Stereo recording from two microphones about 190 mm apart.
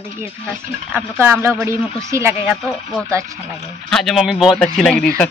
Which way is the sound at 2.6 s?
5° left (ahead or behind).